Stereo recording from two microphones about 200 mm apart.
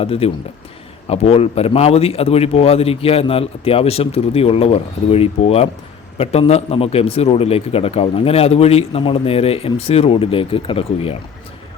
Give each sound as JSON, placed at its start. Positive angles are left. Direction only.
{"t": 0.0, "sound": "a man's voice", "side_deg": 30}